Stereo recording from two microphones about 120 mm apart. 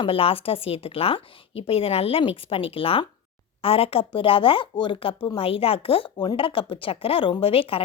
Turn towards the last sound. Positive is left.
turn(degrees=50)  # may be behind; listen again after turning